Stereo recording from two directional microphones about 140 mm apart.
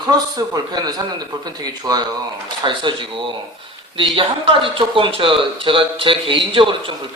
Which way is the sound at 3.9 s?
40° right (ahead or behind).